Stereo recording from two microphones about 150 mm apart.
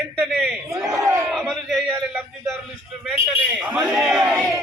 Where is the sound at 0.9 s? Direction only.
20° right (ahead or behind).